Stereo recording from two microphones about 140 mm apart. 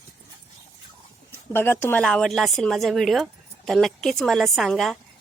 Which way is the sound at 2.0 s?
5° left (ahead or behind).